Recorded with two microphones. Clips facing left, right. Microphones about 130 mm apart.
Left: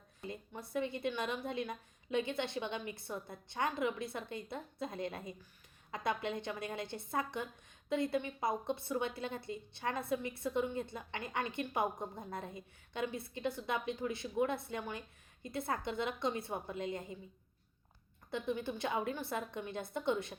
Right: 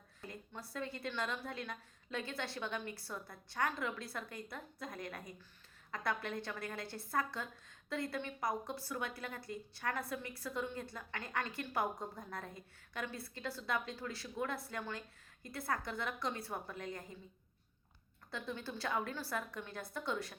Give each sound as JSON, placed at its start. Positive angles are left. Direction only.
{"t": 0.2, "sound": "a woman's voice", "side_deg": 20}
{"t": 18.3, "sound": "a woman's voice", "side_deg": 20}